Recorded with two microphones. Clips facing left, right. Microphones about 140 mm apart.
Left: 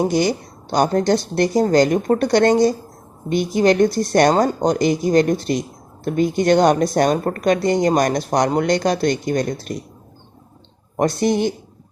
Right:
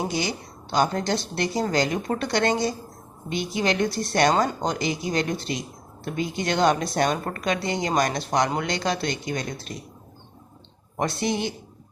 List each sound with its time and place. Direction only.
0.1 s a woman's voice: 45° left (ahead or behind)
10.9 s a woman's voice: 45° left (ahead or behind)